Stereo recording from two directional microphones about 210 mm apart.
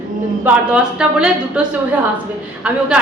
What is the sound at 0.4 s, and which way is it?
Speech, 5° right (ahead or behind).